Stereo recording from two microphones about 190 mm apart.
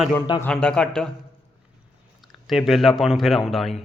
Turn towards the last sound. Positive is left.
turn(degrees=0)  # may be behind; listen again after turning